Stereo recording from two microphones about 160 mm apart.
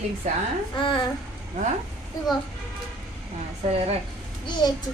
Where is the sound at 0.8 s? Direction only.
30° left (ahead or behind).